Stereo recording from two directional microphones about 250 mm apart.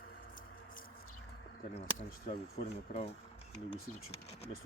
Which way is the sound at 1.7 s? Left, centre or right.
Left.